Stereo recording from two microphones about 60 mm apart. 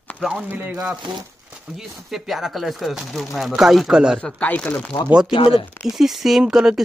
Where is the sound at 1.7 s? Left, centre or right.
Centre.